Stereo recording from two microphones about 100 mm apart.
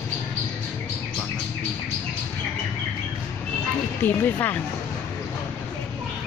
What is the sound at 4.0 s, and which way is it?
Speech, 15° left (ahead or behind).